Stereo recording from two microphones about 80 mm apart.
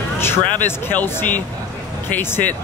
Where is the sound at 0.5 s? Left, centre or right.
Left.